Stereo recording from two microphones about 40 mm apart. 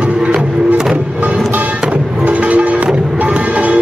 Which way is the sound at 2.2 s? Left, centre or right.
Right.